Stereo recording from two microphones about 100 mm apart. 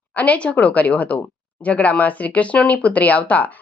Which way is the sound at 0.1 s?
15° left (ahead or behind).